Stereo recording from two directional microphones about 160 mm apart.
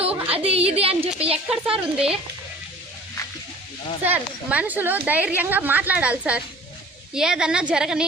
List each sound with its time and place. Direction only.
0.3 s a woman's voice: 35° right (ahead or behind)
1.5 s a woman's voice: 5° right (ahead or behind)
4.0 s a woman's voice: 10° right (ahead or behind)